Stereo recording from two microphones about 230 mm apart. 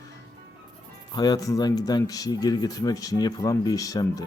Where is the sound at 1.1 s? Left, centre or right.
Centre.